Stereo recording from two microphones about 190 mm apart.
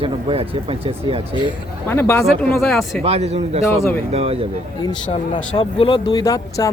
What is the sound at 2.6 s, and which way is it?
Speech, centre (ahead or behind).